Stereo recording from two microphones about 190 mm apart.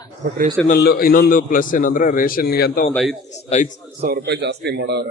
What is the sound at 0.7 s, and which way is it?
A man's voice, 55° left (ahead or behind).